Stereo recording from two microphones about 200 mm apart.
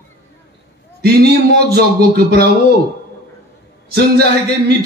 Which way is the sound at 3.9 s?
55° right (ahead or behind).